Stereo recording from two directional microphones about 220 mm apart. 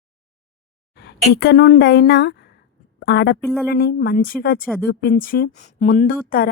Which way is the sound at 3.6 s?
45° left (ahead or behind).